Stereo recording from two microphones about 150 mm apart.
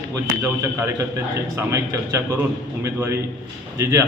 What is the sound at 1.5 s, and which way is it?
A man's voice, 20° right (ahead or behind).